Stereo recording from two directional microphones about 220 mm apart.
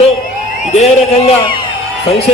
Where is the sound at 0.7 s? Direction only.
30° left (ahead or behind).